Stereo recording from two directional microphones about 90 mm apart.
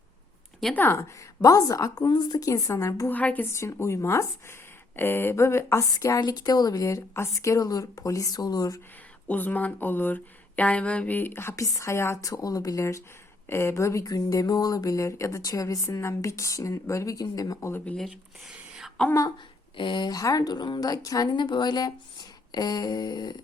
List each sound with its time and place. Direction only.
0.7 s speech: 25° left (ahead or behind)
1.4 s speech: 40° left (ahead or behind)
2.0 s speech: 60° left (ahead or behind)
2.4 s speech: 40° left (ahead or behind)
3.1 s speech: 20° left (ahead or behind)
3.5 s speech: 30° left (ahead or behind)
5.9 s speech: 40° left (ahead or behind)
9.2 s speech: 20° left (ahead or behind); by 17.7 s 45° left (ahead or behind)
17.7 s speech: 20° left (ahead or behind)
17.9 s speech: centre (ahead or behind)
18.5 s a sound: 10° right (ahead or behind)
19.7 s speech: 65° left (ahead or behind)
20.1 s speech: 40° left (ahead or behind)
21.2 s speech: 55° left (ahead or behind)